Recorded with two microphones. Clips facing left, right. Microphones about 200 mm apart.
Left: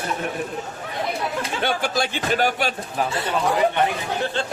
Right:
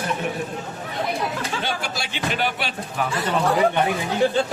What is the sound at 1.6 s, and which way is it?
A man's voice, 50° left (ahead or behind).